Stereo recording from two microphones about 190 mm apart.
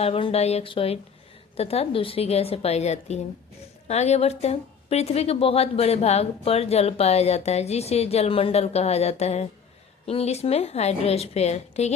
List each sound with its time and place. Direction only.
0.0 s a woman's voice: 30° left (ahead or behind)